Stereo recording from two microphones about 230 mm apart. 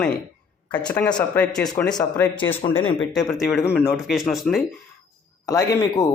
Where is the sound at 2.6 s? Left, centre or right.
Centre.